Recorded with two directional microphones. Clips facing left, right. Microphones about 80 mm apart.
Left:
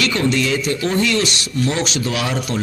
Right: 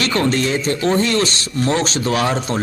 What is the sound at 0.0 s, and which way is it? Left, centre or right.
A man's voice, right.